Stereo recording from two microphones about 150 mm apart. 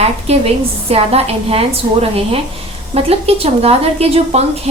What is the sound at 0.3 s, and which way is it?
A woman's voice, 40° right (ahead or behind).